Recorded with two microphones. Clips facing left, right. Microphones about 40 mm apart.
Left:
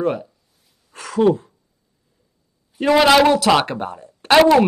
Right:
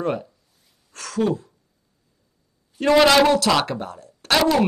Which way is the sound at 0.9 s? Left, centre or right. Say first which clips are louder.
Left 7 dB; centre.